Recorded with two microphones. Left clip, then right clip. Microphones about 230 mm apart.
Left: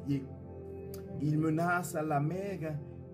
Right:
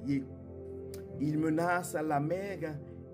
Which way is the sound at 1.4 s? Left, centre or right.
Right.